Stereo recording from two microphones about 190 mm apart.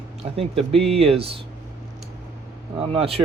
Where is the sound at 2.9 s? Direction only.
30° right (ahead or behind).